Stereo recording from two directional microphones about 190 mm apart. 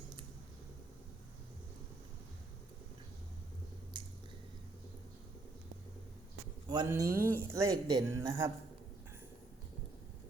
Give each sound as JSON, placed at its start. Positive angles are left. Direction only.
{"t": 3.9, "sound": "squish", "side_deg": -25}
{"t": 6.7, "sound": "speech", "side_deg": -20}